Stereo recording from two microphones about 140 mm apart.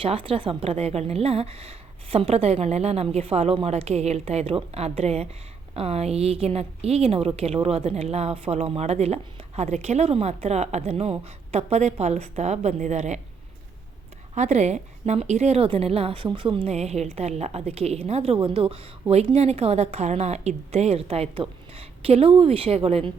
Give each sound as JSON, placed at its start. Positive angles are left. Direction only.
{"t": 0.0, "sound": "a woman's voice", "side_deg": -40}
{"t": 14.3, "sound": "a woman's voice", "side_deg": -55}